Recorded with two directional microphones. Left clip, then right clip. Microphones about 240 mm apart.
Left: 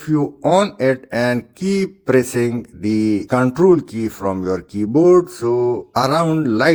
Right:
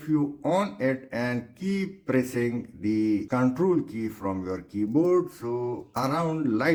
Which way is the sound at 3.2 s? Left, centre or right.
Left.